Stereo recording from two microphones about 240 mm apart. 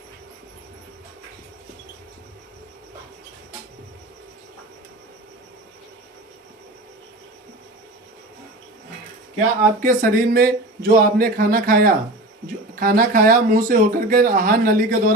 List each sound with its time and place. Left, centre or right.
9.8 s speech: right